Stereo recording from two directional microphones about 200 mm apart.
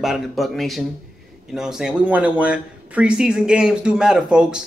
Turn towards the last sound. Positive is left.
turn(degrees=-5)  # may be behind; listen again after turning